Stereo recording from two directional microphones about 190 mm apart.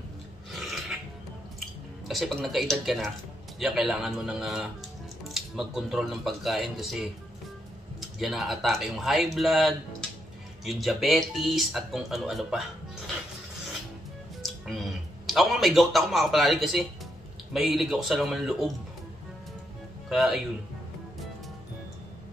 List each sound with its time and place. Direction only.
0.5 s a sound: centre (ahead or behind)
2.0 s speech: centre (ahead or behind)
8.2 s speech: centre (ahead or behind)
15.2 s speech: centre (ahead or behind)
20.1 s speech: centre (ahead or behind)